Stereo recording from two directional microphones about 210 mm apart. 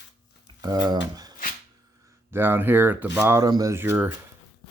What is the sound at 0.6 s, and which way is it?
Speech, 20° right (ahead or behind).